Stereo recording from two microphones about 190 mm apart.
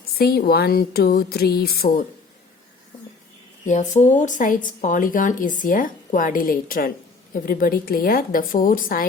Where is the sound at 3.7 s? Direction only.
40° left (ahead or behind).